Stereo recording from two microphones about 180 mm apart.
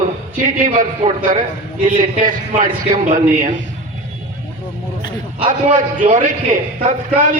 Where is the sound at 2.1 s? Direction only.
50° right (ahead or behind).